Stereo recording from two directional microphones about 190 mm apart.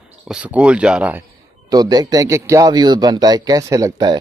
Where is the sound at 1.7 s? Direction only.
20° right (ahead or behind).